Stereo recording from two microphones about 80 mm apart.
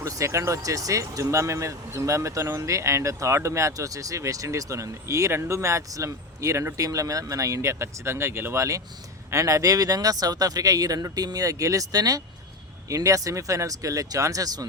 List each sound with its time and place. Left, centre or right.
0.0 s speech: right